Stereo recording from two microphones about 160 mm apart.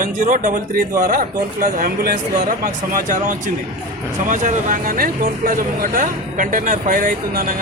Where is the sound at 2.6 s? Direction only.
55° right (ahead or behind).